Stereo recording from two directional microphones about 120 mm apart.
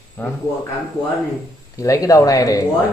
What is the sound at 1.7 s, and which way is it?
Speech, 30° left (ahead or behind).